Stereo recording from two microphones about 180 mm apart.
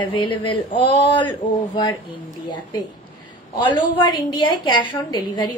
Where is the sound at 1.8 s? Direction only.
25° left (ahead or behind).